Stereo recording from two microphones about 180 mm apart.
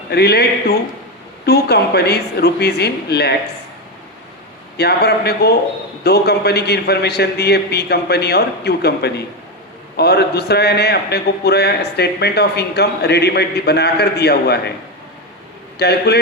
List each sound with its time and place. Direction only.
0.1 s a man's voice: 65° left (ahead or behind)
4.8 s a man's voice: 65° left (ahead or behind)
15.8 s a man's voice: 65° left (ahead or behind)